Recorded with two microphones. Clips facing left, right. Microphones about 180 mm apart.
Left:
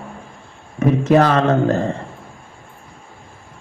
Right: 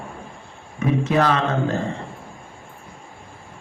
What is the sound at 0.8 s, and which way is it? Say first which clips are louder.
Speech: left 6 dB; 45° left (ahead or behind).